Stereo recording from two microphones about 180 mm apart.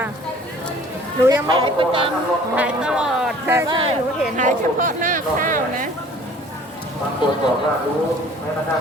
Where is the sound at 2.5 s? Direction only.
5° right (ahead or behind).